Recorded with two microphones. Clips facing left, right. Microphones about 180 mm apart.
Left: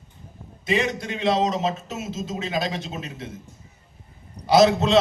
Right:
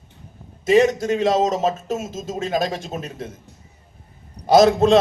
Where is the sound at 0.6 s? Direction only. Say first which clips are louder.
Right 9 dB; 45° right (ahead or behind).